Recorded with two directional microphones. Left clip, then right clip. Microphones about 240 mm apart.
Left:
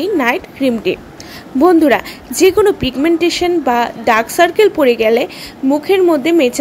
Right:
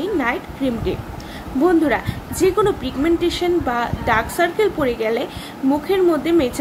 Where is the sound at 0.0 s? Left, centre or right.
Left.